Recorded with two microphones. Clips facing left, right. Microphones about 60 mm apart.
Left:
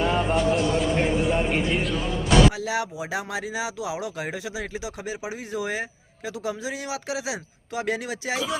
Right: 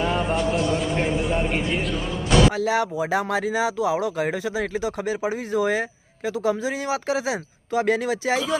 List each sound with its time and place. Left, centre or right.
0.0 s a man's voice: centre
2.6 s speech: right